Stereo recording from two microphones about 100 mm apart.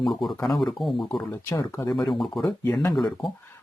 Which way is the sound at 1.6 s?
30° left (ahead or behind).